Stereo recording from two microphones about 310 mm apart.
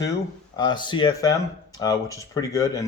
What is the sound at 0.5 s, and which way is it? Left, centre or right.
Speech, centre.